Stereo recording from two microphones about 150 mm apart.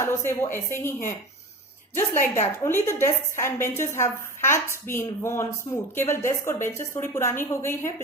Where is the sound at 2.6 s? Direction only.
15° left (ahead or behind).